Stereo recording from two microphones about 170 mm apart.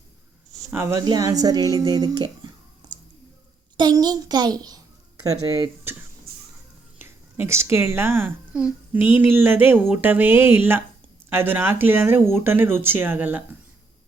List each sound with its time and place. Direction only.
0.7 s speech: 15° right (ahead or behind)
3.8 s speech: 25° right (ahead or behind)
6.3 s a sound: 65° right (ahead or behind)
7.0 s speech: 15° right (ahead or behind)